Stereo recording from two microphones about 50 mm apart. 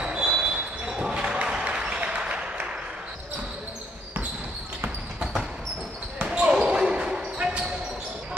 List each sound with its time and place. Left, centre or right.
0.0 s basketball bounce: centre
1.2 s music: centre
6.2 s basketball bounce: centre